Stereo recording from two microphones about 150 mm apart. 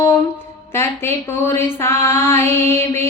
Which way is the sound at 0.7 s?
15° left (ahead or behind).